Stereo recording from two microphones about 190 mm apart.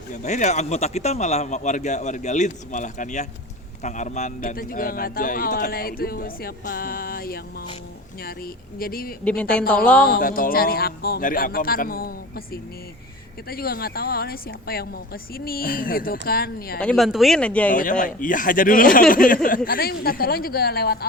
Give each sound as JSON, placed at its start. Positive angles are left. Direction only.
{"t": 0.1, "sound": "speech", "side_deg": 40}
{"t": 8.8, "sound": "speech", "side_deg": 50}
{"t": 9.2, "sound": "speech", "side_deg": 5}
{"t": 10.1, "sound": "speech", "side_deg": 50}
{"t": 13.5, "sound": "speech", "side_deg": 50}
{"t": 16.8, "sound": "speech", "side_deg": 0}
{"t": 18.0, "sound": "speech", "side_deg": 45}